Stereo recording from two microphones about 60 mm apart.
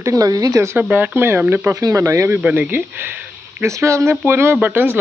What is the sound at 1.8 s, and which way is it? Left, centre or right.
Speech, right.